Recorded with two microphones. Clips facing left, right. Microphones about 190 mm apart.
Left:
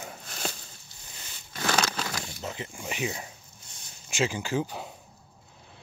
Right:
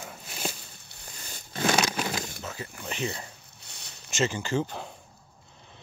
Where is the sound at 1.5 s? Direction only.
20° right (ahead or behind).